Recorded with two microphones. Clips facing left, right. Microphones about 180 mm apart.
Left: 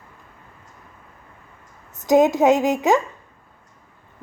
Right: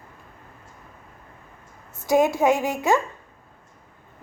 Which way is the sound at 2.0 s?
20° left (ahead or behind).